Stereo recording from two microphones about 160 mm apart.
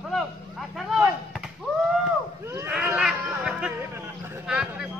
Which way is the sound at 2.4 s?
15° right (ahead or behind).